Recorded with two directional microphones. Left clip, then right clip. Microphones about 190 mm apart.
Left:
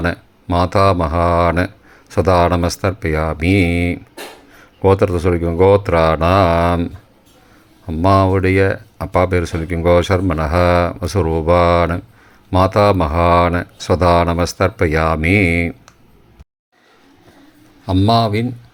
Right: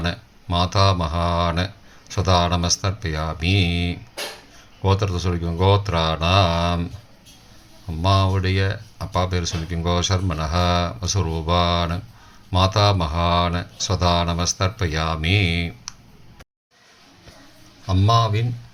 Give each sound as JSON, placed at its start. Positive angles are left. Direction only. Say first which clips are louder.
{"t": 0.0, "sound": "speech", "louder": "left 7 dB", "side_deg": 35}
{"t": 7.9, "sound": "speech", "louder": "left 8 dB", "side_deg": 40}
{"t": 17.8, "sound": "speech", "louder": "left 5 dB", "side_deg": 40}